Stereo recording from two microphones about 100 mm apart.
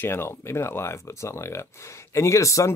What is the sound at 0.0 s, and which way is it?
Speech, 25° left (ahead or behind).